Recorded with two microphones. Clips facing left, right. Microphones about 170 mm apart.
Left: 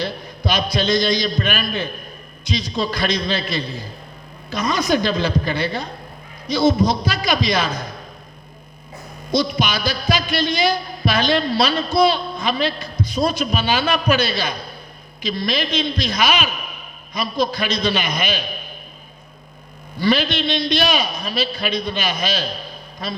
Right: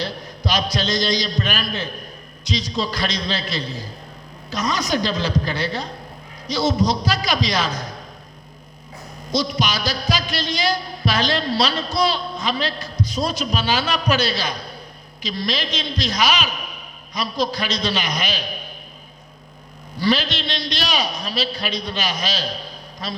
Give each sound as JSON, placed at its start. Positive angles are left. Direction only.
{"t": 0.0, "sound": "a man's voice", "side_deg": 55}
{"t": 9.3, "sound": "a man's voice", "side_deg": 55}
{"t": 20.0, "sound": "a man's voice", "side_deg": 55}